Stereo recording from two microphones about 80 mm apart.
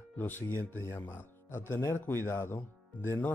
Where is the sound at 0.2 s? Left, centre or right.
Left.